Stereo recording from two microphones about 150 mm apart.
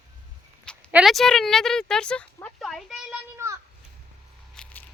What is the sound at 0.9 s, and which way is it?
Speech, 5° right (ahead or behind).